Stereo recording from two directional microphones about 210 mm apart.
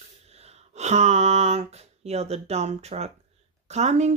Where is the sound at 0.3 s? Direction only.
30° right (ahead or behind).